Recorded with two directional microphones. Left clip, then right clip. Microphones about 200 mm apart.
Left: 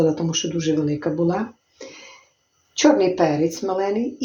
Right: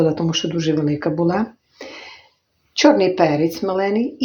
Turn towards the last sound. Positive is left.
turn(degrees=-35)  # may be behind; listen again after turning